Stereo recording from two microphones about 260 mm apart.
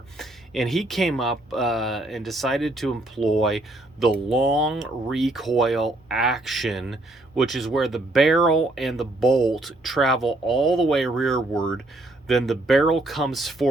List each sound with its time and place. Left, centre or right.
0.2 s speech: centre